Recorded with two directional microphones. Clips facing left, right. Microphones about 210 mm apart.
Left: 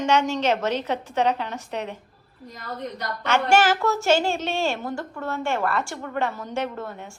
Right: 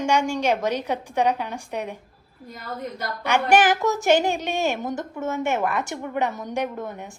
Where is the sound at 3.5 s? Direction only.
15° right (ahead or behind).